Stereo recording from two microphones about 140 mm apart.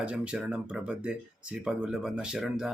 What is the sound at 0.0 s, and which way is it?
Speech, 10° right (ahead or behind).